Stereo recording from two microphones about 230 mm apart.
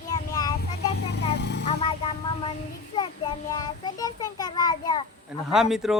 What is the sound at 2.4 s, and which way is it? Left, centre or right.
Child singing, left.